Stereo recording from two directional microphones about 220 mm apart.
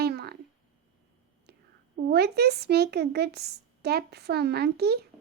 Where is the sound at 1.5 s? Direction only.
45° right (ahead or behind).